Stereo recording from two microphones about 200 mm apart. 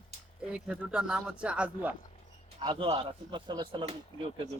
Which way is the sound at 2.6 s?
25° right (ahead or behind).